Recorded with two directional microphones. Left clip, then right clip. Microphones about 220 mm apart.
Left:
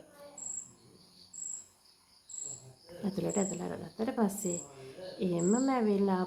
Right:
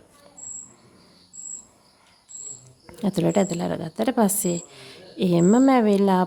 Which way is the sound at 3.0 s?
50° right (ahead or behind).